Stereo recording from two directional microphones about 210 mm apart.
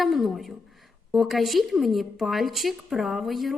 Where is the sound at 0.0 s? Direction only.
Centre (ahead or behind).